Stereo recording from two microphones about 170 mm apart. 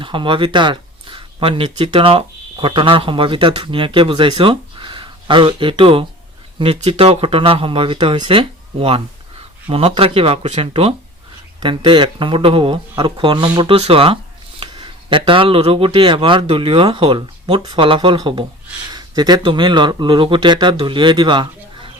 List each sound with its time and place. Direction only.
0.0 s speech: 30° right (ahead or behind)